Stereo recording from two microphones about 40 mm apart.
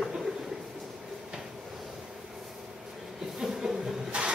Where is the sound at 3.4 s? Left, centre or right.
Centre.